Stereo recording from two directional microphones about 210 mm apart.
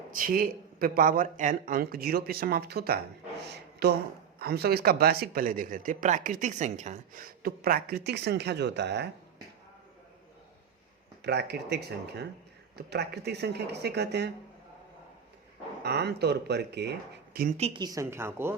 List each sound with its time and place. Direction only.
0.1 s speech: 40° right (ahead or behind)
3.4 s a sound: 50° right (ahead or behind)
4.4 s speech: 50° right (ahead or behind)
11.2 s speech: 50° right (ahead or behind)
15.8 s speech: 50° right (ahead or behind)
17.6 s a woman's voice: 20° right (ahead or behind)